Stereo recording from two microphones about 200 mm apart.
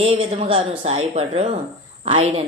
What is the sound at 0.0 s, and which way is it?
A woman's voice, 30° right (ahead or behind).